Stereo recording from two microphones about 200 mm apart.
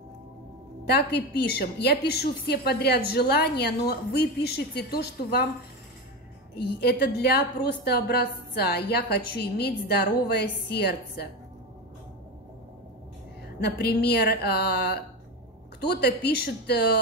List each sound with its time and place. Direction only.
0.8 s a woman's voice: 55° left (ahead or behind)
6.6 s a woman's voice: 55° left (ahead or behind)
13.6 s a woman's voice: 50° left (ahead or behind)